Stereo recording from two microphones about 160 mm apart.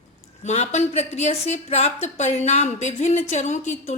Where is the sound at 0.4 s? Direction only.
45° left (ahead or behind).